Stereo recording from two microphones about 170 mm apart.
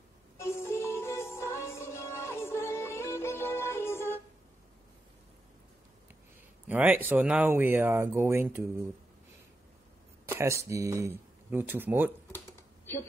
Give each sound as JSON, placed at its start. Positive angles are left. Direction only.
{"t": 0.4, "sound": "music", "side_deg": 15}
{"t": 6.7, "sound": "speech", "side_deg": -10}
{"t": 10.2, "sound": "speech", "side_deg": -15}